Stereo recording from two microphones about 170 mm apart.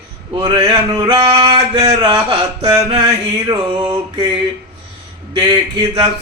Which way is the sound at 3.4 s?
20° right (ahead or behind).